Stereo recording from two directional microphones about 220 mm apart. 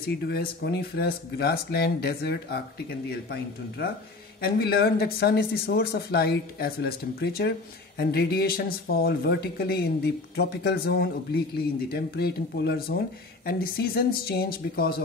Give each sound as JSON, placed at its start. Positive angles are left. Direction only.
{"t": 0.0, "sound": "speech", "side_deg": 45}